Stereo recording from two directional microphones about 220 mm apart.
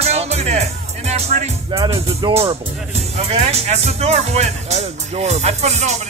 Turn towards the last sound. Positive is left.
turn(degrees=-30)  # may be behind; listen again after turning